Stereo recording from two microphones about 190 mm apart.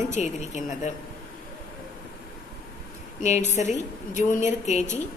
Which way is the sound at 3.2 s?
35° left (ahead or behind).